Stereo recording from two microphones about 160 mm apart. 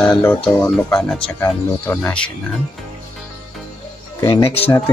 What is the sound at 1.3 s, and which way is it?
Speech, 15° left (ahead or behind).